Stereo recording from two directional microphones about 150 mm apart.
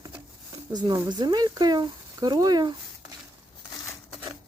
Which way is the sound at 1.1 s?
30° right (ahead or behind).